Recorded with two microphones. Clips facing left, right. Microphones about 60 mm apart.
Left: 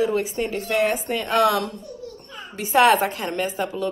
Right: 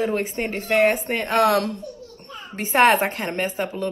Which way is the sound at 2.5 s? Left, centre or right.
Right.